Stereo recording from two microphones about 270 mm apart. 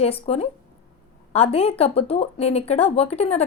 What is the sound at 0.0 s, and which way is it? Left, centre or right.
A woman's voice, left.